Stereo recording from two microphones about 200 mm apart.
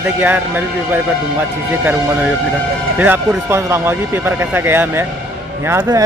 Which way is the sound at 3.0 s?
10° right (ahead or behind).